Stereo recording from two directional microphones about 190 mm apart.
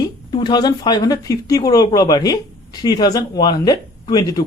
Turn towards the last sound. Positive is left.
turn(degrees=20)  # may be behind; listen again after turning